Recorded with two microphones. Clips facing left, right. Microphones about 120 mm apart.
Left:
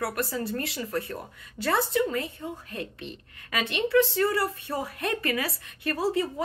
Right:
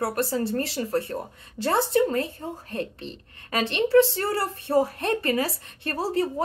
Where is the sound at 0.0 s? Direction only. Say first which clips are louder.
Right 4 dB; 35° right (ahead or behind).